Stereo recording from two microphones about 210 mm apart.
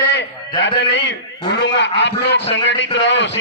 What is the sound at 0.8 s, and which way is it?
A man's voice, 55° left (ahead or behind).